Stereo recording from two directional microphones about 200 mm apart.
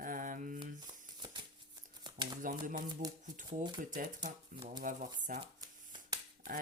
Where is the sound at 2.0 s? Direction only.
20° right (ahead or behind).